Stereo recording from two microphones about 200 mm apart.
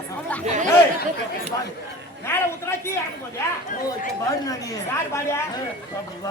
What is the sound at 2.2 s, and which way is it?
Speech, 10° left (ahead or behind).